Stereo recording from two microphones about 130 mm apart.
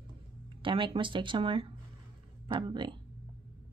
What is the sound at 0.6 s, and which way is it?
Speech, 40° right (ahead or behind).